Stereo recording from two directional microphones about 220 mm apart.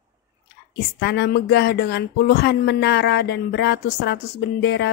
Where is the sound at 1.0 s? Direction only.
50° left (ahead or behind).